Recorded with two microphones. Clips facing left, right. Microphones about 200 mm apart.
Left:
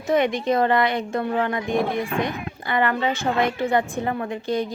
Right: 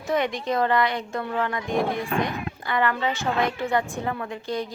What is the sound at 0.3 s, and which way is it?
Speech, 20° left (ahead or behind).